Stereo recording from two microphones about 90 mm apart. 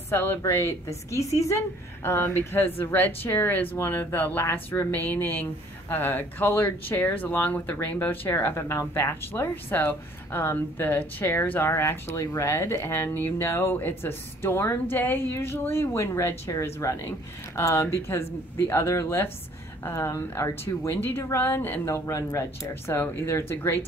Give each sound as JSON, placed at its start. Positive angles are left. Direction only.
{"t": 0.1, "sound": "speech", "side_deg": 25}
{"t": 21.8, "sound": "speech", "side_deg": 35}